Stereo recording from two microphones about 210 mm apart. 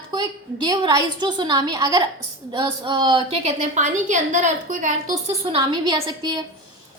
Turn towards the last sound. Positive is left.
turn(degrees=-20)  # may be behind; listen again after turning